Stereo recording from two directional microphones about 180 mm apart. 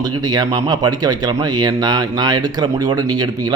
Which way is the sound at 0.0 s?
20° right (ahead or behind).